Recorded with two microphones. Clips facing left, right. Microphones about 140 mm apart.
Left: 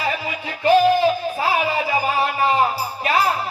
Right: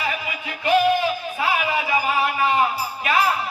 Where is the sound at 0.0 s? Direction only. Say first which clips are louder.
Left 3 dB; 35° left (ahead or behind).